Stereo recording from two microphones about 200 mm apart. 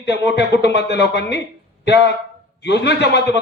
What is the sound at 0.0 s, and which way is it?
Speech, 60° left (ahead or behind).